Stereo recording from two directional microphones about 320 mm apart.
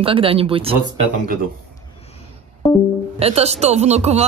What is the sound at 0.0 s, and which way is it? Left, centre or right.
Speech, centre.